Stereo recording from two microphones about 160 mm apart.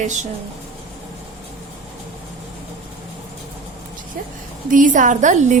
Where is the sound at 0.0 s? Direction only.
50° right (ahead or behind).